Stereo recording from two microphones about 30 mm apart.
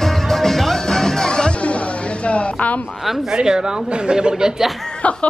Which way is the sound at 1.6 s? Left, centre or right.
Left.